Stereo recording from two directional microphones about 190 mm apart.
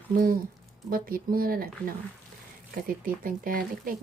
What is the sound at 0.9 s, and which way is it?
Speech, 50° right (ahead or behind).